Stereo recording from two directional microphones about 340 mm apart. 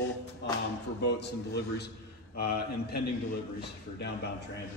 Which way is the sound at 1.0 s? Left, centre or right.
Left.